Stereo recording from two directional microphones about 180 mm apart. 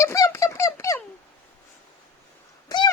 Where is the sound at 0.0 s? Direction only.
15° left (ahead or behind).